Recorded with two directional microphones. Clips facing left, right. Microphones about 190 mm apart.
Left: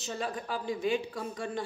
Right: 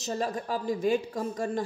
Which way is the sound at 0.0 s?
40° right (ahead or behind).